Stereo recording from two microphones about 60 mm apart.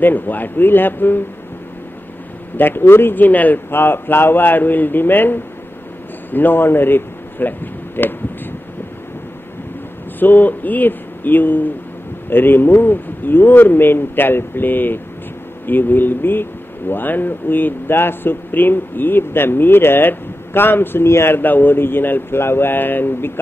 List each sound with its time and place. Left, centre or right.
0.0 s speech: left
2.5 s speech: left
6.3 s a sound: left
10.1 s speech: left